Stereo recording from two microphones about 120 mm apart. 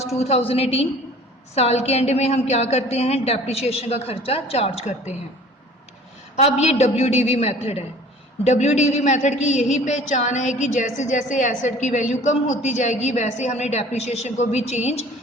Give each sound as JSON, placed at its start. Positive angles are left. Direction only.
{"t": 0.2, "sound": "a man's voice", "side_deg": 60}
{"t": 6.3, "sound": "a man's voice", "side_deg": 65}
{"t": 8.4, "sound": "a woman's voice", "side_deg": 70}